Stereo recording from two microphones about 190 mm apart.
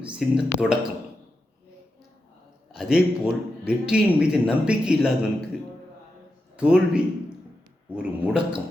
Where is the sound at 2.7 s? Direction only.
Centre (ahead or behind).